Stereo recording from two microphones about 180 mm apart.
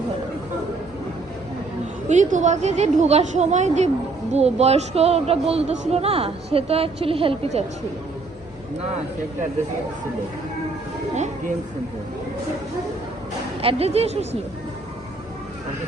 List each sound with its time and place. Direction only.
2.0 s a woman's voice: 40° right (ahead or behind)
11.1 s a woman's voice: 40° right (ahead or behind)
13.6 s a woman's voice: 35° right (ahead or behind)